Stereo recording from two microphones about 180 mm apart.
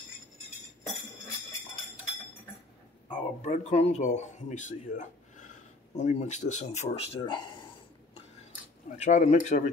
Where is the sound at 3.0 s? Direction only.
40° left (ahead or behind).